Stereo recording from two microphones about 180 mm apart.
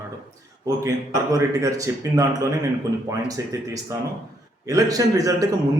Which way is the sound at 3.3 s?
20° right (ahead or behind).